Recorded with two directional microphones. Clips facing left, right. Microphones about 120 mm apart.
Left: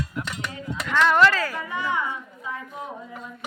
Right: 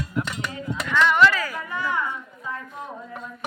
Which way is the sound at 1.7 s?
15° left (ahead or behind).